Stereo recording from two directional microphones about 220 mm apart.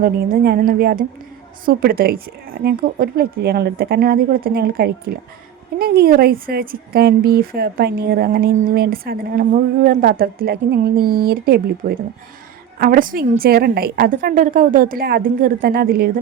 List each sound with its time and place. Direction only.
0.0 s a woman's voice: 40° right (ahead or behind)